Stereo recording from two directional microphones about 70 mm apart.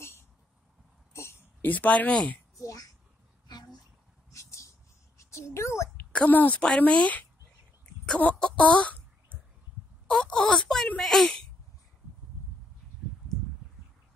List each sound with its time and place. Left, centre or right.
1.1 s a sound: left
1.6 s a woman's voice: left
2.6 s a child's voice: left
3.4 s a sound: left
4.3 s a sound: left
6.1 s a woman's voice: left
7.8 s throat clearing: centre
8.2 s speech: centre
10.0 s speech: centre